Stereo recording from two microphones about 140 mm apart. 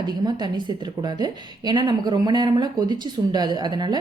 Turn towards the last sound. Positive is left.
turn(degrees=-30)  # may be behind; listen again after turning